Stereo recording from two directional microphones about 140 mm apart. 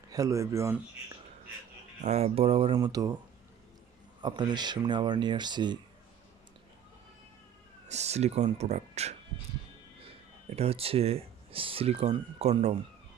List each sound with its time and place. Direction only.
0.1 s speech: 25° right (ahead or behind)
2.0 s speech: 50° right (ahead or behind)
2.7 s speech: 25° right (ahead or behind)
4.2 s speech: 35° right (ahead or behind)
7.9 s speech: 50° right (ahead or behind)